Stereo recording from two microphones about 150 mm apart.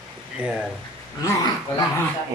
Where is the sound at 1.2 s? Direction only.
25° left (ahead or behind).